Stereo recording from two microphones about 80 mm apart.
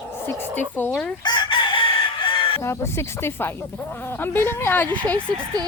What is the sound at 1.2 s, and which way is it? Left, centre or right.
Chicken, left.